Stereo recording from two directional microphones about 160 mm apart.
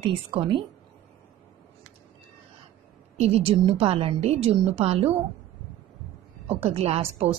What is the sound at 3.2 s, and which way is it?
A woman's voice, 35° right (ahead or behind).